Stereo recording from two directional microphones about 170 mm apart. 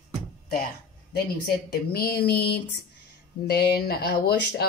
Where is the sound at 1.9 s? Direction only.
65° left (ahead or behind).